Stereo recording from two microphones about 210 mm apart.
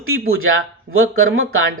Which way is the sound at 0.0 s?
80° right.